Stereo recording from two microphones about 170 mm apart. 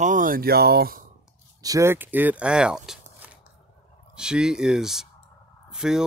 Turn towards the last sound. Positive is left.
turn(degrees=-5)  # may be behind; listen again after turning